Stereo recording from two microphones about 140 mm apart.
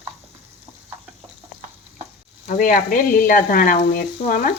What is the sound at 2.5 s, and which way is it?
Speech, 75° left (ahead or behind).